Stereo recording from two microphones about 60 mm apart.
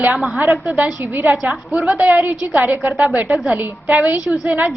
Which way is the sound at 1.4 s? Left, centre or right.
Centre.